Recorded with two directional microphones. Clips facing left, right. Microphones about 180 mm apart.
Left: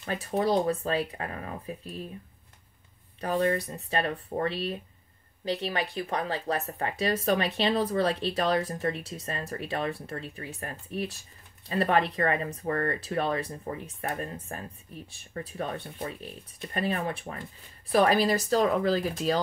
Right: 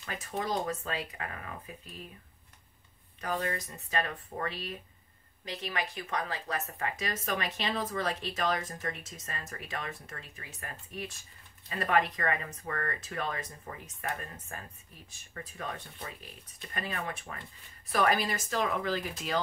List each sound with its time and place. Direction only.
0.0 s speech: 35° left (ahead or behind)
3.2 s speech: 30° left (ahead or behind)